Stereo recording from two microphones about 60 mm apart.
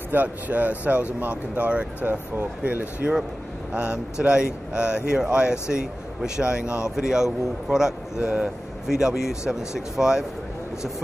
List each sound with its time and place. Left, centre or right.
0.1 s speech: right; by 10.2 s centre